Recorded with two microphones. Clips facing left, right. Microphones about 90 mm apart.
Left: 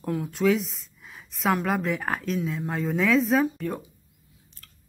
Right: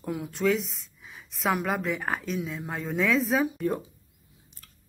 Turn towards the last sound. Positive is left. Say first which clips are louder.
# left 1 dB
turn(degrees=-15)  # may be behind; listen again after turning